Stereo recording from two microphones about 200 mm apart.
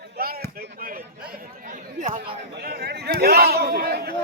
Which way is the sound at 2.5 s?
50° right (ahead or behind).